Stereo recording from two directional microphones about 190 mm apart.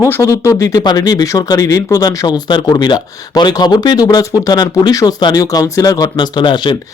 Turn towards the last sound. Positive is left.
turn(degrees=25)  # may be behind; listen again after turning